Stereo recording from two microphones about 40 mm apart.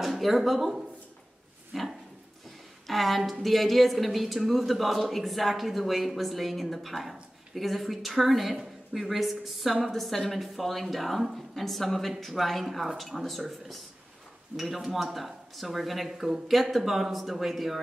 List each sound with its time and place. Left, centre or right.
0.0 s a woman's voice: centre
14.5 s speech: right
15.1 s a woman's voice: centre